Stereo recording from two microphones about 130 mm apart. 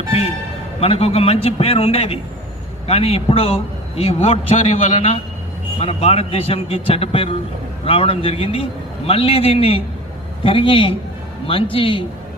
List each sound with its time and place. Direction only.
0.8 s a man's voice: 50° left (ahead or behind)